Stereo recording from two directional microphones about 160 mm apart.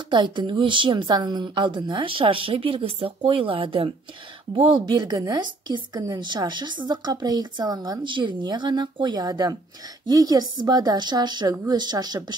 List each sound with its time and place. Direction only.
0.1 s a woman's voice: 30° right (ahead or behind)